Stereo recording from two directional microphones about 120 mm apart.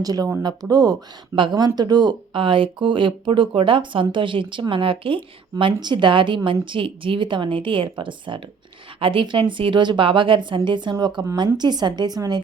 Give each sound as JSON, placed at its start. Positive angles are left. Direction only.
{"t": 0.0, "sound": "a woman's voice", "side_deg": -30}